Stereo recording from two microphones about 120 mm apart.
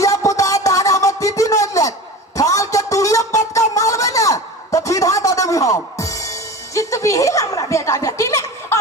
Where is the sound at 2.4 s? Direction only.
25° left (ahead or behind).